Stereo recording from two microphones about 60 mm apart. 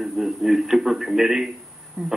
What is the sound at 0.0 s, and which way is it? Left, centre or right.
A man's voice, centre.